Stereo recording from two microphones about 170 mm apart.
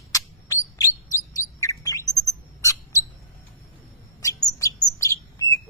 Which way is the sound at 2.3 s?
20° left (ahead or behind).